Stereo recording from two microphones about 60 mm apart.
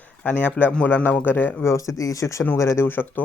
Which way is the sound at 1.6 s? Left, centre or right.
Left.